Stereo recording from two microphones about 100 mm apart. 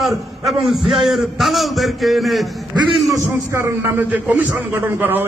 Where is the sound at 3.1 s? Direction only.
25° right (ahead or behind).